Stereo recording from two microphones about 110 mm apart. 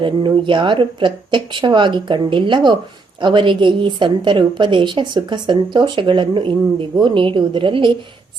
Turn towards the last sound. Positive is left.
turn(degrees=-50)  # may be behind; listen again after turning